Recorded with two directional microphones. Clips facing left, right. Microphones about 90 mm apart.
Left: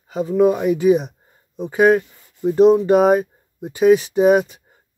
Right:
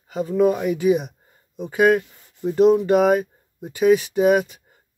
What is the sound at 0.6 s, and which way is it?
Speech, 35° left (ahead or behind).